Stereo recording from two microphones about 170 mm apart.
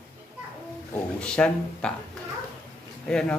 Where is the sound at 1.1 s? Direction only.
5° left (ahead or behind).